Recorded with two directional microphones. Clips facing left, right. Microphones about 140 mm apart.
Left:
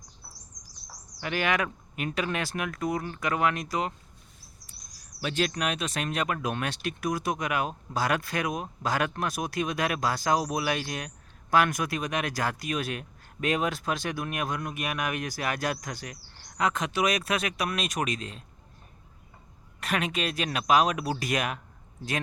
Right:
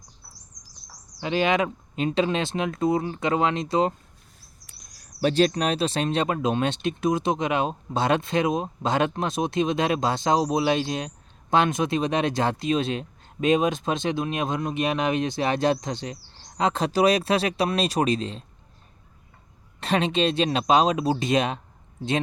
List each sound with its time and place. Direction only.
1.2 s speech: 20° right (ahead or behind)
5.2 s speech: 35° right (ahead or behind)
19.8 s speech: 25° right (ahead or behind)